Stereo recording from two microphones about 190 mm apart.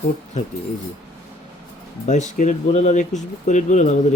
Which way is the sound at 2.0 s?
40° left (ahead or behind).